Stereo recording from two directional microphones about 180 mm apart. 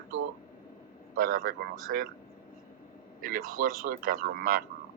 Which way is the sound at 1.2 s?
50° right (ahead or behind).